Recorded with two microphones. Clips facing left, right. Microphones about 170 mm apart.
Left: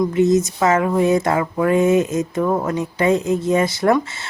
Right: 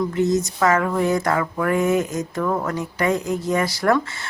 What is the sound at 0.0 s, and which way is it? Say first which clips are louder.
Speech: left 4 dB; 20° left (ahead or behind).